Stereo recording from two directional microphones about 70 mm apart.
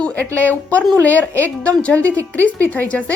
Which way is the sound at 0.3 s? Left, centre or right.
Left.